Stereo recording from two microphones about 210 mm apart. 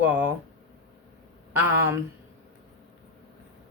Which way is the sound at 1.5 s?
10° right (ahead or behind).